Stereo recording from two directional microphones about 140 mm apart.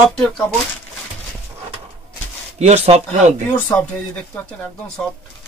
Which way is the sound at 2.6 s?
50° right (ahead or behind).